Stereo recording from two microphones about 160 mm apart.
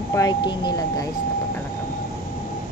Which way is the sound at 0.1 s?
25° left (ahead or behind).